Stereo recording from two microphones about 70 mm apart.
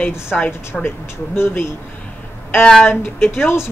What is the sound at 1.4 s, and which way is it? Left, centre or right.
Speech, left.